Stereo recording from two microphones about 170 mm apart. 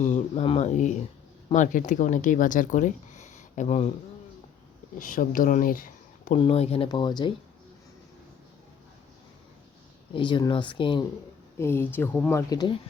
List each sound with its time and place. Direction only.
0.0 s speech: 45° left (ahead or behind)
4.9 s speech: 50° left (ahead or behind)
6.4 s speech: 35° left (ahead or behind)
6.8 s speech: 25° left (ahead or behind)
10.2 s speech: 30° left (ahead or behind)
11.5 s speech: 15° left (ahead or behind)